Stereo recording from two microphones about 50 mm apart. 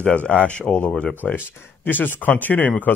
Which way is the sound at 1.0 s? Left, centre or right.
Left.